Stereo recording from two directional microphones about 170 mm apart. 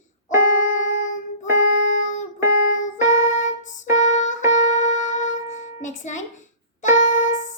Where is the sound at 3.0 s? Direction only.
45° left (ahead or behind).